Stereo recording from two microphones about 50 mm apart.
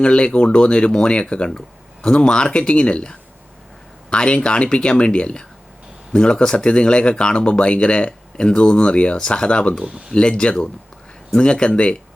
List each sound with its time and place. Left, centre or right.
0.0 s speech: centre